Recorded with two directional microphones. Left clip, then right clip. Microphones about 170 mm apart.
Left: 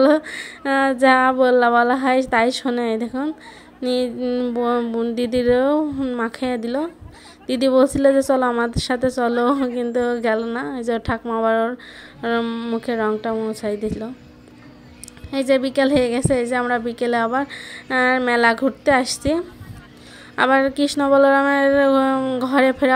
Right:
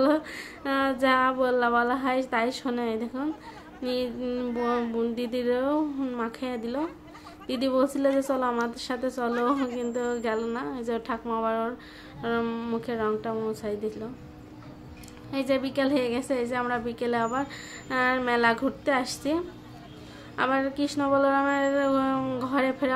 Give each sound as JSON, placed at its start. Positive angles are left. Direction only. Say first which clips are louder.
{"t": 0.0, "sound": "a woman's voice", "louder": "left 9 dB", "side_deg": 40}
{"t": 15.3, "sound": "a woman's voice", "louder": "left 9 dB", "side_deg": 40}